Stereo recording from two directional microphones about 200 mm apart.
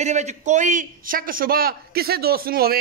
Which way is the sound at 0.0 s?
35° right (ahead or behind).